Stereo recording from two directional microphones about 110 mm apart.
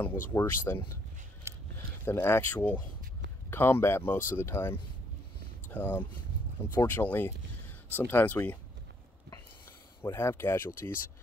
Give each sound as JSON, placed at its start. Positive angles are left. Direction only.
{"t": 0.0, "sound": "speech", "side_deg": 25}
{"t": 1.5, "sound": "a sound", "side_deg": -25}
{"t": 2.0, "sound": "speech", "side_deg": 20}
{"t": 10.1, "sound": "speech", "side_deg": 25}